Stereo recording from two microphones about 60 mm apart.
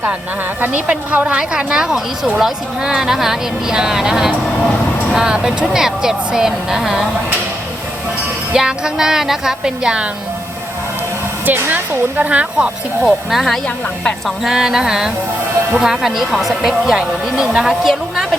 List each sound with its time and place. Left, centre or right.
1.1 s speech: right
1.4 s a woman's voice: centre
8.5 s a woman's voice: centre
11.4 s speech: right
13.0 s a woman's voice: centre